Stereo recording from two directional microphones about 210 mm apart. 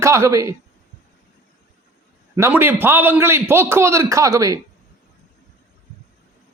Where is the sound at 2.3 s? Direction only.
10° right (ahead or behind).